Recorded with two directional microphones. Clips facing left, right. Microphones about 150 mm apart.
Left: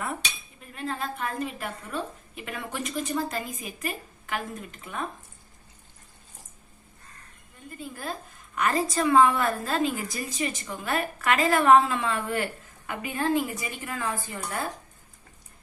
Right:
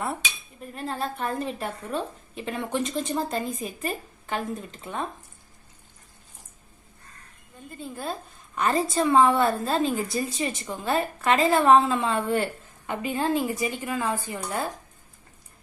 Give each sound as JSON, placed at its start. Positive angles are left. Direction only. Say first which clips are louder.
{"t": 0.7, "sound": "a woman's voice", "louder": "right 2 dB", "side_deg": -35}
{"t": 7.8, "sound": "a woman's voice", "louder": "right 3 dB", "side_deg": -25}